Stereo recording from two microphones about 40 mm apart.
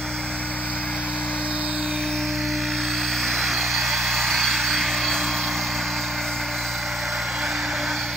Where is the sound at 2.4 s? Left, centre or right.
Centre.